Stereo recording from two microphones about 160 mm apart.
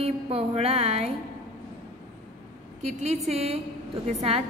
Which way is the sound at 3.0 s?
40° right (ahead or behind).